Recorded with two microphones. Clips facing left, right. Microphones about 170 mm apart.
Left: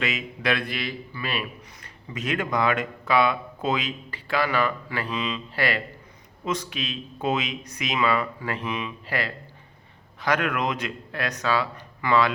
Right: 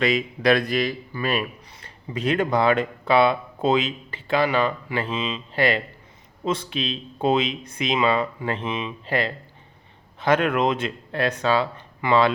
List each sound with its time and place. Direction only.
0.0 s a man's voice: 35° right (ahead or behind)
1.8 s speech: 30° right (ahead or behind)